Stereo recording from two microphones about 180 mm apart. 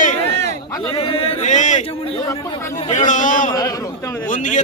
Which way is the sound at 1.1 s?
30° left (ahead or behind).